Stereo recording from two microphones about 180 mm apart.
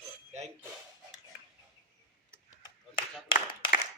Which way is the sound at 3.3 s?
55° left (ahead or behind).